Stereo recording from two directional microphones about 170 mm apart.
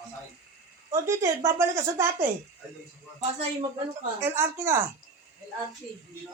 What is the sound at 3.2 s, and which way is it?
Speech, 40° right (ahead or behind).